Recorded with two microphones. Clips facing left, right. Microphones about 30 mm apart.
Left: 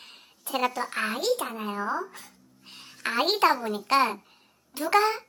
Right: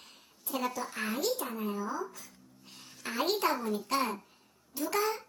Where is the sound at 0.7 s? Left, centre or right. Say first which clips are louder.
Left 5 dB; left.